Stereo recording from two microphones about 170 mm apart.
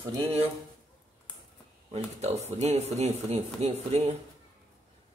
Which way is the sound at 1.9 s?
40° right (ahead or behind).